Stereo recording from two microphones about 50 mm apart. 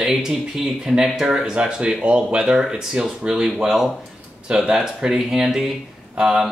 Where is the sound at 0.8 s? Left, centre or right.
Centre.